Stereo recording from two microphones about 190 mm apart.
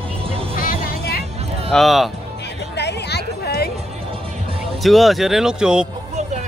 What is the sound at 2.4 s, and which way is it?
Music, 60° left (ahead or behind).